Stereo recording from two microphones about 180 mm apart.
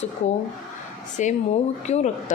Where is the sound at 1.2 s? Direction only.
40° left (ahead or behind).